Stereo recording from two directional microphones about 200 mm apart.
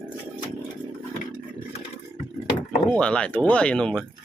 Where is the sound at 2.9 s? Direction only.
5° left (ahead or behind).